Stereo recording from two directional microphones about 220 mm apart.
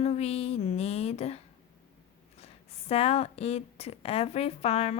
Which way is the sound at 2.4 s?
30° left (ahead or behind).